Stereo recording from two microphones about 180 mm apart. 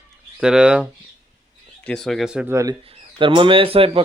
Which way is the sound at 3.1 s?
30° right (ahead or behind).